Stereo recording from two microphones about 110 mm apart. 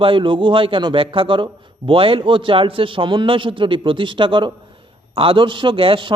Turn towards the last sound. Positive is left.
turn(degrees=-50)  # may be behind; listen again after turning